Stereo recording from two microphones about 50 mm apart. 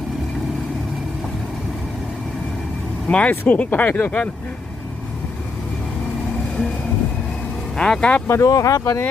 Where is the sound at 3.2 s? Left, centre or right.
Left.